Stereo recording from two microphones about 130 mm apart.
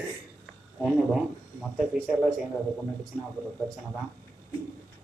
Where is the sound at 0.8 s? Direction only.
5° right (ahead or behind).